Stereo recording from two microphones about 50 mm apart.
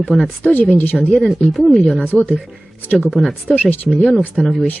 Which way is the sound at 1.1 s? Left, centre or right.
Centre.